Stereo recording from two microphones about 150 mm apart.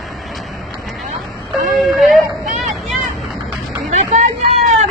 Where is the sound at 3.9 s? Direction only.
45° right (ahead or behind).